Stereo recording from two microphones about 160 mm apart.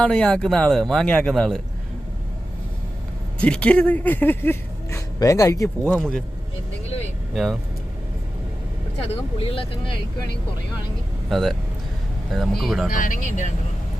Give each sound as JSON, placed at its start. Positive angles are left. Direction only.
{"t": 0.0, "sound": "a man's voice", "side_deg": 5}
{"t": 3.4, "sound": "speech", "side_deg": 10}
{"t": 5.8, "sound": "a man's voice", "side_deg": 5}
{"t": 7.3, "sound": "a man's voice", "side_deg": 0}
{"t": 9.0, "sound": "speech", "side_deg": 35}
{"t": 11.3, "sound": "a man's voice", "side_deg": 0}
{"t": 12.9, "sound": "speech", "side_deg": 55}